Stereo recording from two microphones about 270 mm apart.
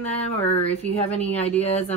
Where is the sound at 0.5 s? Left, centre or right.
Left.